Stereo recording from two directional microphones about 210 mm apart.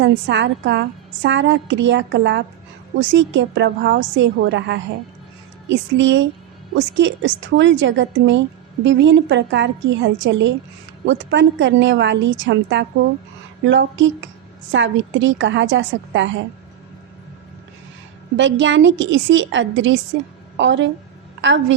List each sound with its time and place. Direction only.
0.0 s a woman's voice: 60° right (ahead or behind)
18.3 s a woman's voice: 60° right (ahead or behind)